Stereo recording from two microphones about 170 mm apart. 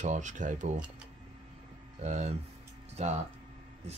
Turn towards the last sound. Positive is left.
turn(degrees=-40)  # may be behind; listen again after turning